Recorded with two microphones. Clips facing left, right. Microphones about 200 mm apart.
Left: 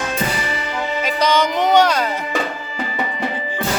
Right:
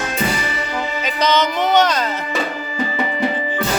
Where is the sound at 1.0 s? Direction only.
10° left (ahead or behind).